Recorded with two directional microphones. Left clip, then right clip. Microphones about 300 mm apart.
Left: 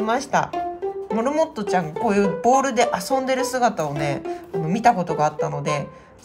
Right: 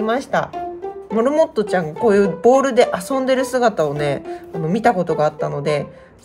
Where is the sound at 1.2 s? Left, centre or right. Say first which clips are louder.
Right 6 dB; left.